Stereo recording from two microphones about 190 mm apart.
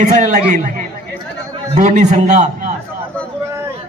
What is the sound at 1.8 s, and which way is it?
Speech, 40° right (ahead or behind).